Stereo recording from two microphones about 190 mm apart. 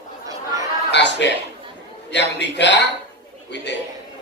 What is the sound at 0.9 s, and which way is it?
A man's voice, 65° left (ahead or behind).